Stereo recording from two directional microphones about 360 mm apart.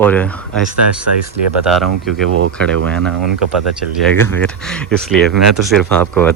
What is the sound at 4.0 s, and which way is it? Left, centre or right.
Speech, centre.